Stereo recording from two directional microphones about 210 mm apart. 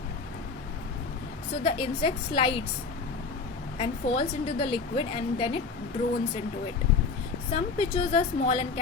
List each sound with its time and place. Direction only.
1.6 s a woman's voice: 25° left (ahead or behind)
3.8 s a woman's voice: 25° left (ahead or behind)
7.5 s a woman's voice: 25° left (ahead or behind)